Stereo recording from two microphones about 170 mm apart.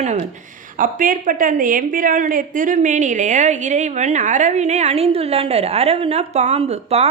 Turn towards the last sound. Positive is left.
turn(degrees=-35)  # may be behind; listen again after turning